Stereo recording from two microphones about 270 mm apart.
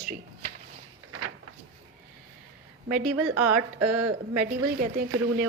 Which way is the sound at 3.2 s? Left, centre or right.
Right.